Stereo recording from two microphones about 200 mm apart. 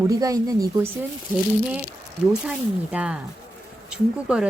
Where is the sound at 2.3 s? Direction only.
5° right (ahead or behind).